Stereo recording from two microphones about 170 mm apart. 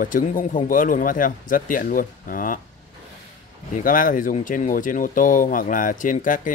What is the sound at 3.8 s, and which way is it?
Speech, 55° left (ahead or behind).